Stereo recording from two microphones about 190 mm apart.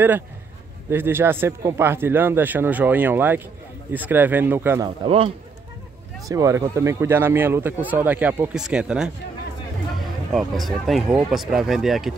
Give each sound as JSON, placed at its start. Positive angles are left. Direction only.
{"t": 0.8, "sound": "speech", "side_deg": -10}
{"t": 4.8, "sound": "a man's voice", "side_deg": -30}
{"t": 6.2, "sound": "speech", "side_deg": -15}
{"t": 10.3, "sound": "speech", "side_deg": 0}